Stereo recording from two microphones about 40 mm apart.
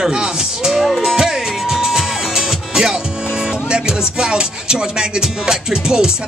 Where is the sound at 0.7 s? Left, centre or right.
Centre.